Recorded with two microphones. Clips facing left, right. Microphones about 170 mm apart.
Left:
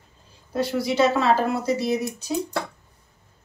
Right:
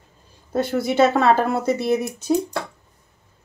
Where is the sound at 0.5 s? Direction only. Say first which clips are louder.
Right 2 dB; 50° right (ahead or behind).